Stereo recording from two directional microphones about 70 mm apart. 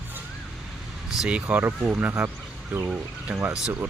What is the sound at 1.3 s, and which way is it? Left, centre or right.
Speech, right.